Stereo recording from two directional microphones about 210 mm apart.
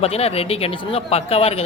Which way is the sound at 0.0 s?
30° left (ahead or behind).